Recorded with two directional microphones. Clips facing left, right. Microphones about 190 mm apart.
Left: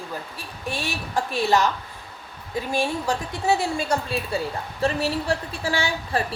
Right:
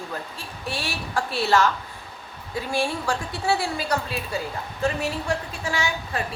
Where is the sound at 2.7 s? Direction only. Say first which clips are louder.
Left 1 dB; 20° left (ahead or behind).